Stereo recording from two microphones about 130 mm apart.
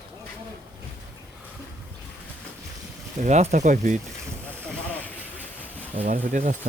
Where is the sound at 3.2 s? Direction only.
60° right (ahead or behind).